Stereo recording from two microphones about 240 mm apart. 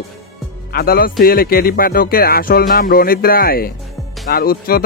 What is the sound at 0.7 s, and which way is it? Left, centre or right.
Speech, left.